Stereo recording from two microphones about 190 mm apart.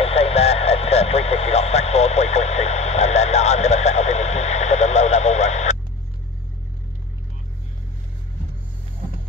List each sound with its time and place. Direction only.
0.0 s radio: 30° left (ahead or behind)